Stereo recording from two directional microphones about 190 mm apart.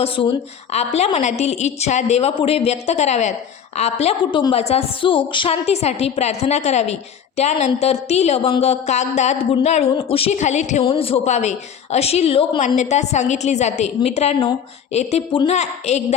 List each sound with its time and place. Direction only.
0.0 s a woman's voice: 30° left (ahead or behind)